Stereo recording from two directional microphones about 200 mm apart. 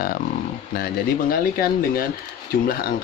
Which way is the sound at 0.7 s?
45° left (ahead or behind).